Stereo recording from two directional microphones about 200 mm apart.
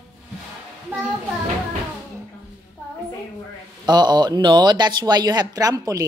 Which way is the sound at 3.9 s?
20° right (ahead or behind).